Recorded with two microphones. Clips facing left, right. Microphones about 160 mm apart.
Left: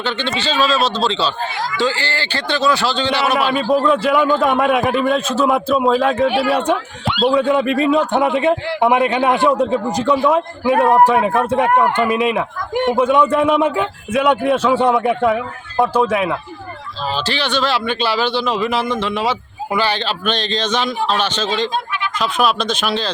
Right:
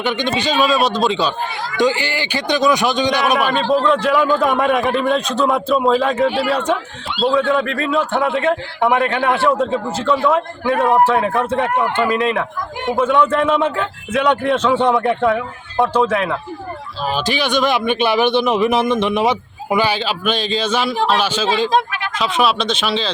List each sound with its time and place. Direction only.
0.0 s a man's voice: 15° right (ahead or behind)
3.7 s a man's voice: 5° left (ahead or behind)
10.7 s a man's voice: centre (ahead or behind)
10.9 s a man's voice: 15° left (ahead or behind)
17.2 s a man's voice: 10° right (ahead or behind)